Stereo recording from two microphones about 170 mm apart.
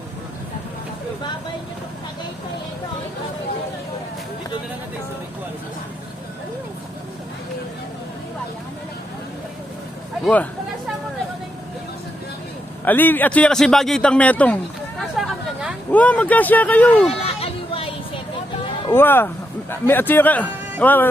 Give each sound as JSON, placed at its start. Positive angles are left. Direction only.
{"t": 10.2, "sound": "a man's voice", "side_deg": 10}
{"t": 12.8, "sound": "a man's voice", "side_deg": 10}
{"t": 17.1, "sound": "a sound", "side_deg": 35}
{"t": 18.9, "sound": "a man's voice", "side_deg": 10}